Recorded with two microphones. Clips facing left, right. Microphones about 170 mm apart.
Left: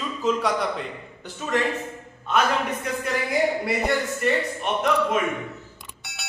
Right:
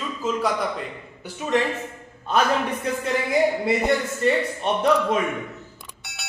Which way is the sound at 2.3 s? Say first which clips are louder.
Right 1 dB; 35° right (ahead or behind).